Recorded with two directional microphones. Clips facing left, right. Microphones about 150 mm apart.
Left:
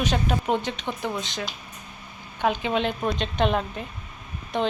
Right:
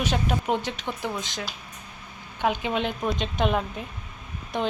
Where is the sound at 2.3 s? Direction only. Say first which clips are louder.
Left 1 dB; 10° right (ahead or behind).